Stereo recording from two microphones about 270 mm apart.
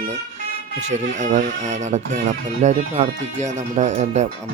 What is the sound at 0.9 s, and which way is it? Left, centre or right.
Speech, right.